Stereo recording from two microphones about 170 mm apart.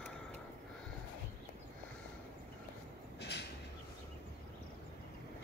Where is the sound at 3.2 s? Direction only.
80° left.